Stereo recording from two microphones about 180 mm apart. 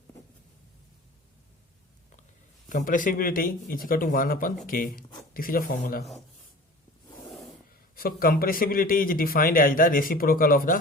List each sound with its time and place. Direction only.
2.6 s speech: 45° left (ahead or behind)
7.9 s speech: 55° left (ahead or behind)